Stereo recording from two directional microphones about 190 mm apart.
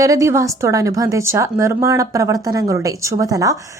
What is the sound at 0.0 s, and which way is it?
A woman's voice, 15° right (ahead or behind).